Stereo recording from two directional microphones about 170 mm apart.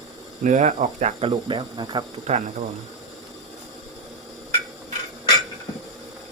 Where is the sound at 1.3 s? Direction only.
25° right (ahead or behind).